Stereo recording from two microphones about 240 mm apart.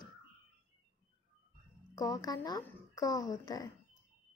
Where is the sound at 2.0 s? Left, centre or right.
Centre.